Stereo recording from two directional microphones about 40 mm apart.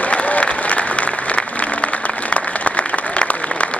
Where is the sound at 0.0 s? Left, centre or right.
Left.